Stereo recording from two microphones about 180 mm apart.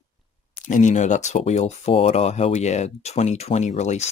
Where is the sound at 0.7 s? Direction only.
45° left (ahead or behind).